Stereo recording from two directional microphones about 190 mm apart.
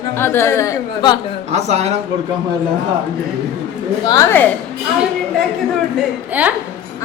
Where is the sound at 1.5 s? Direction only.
35° right (ahead or behind).